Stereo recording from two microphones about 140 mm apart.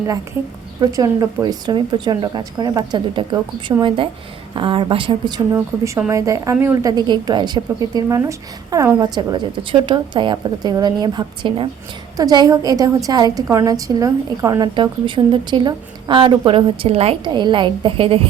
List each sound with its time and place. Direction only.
0.8 s a woman's voice: 25° right (ahead or behind)
6.9 s a woman's voice: 30° right (ahead or behind); by 17.2 s 45° right (ahead or behind)
17.2 s a woman's voice: 35° right (ahead or behind)